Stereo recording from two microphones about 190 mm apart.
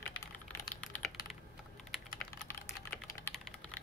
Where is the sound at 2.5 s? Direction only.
15° left (ahead or behind).